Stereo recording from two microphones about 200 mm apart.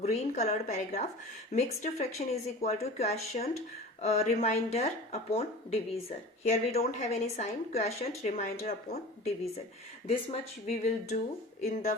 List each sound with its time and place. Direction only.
0.0 s speech: 35° left (ahead or behind)